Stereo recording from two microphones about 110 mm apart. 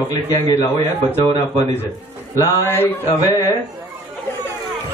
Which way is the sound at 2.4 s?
20° left (ahead or behind).